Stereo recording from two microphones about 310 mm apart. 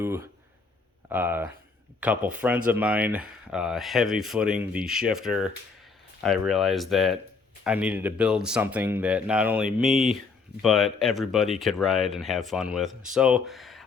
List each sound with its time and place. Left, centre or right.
0.0 s speech: centre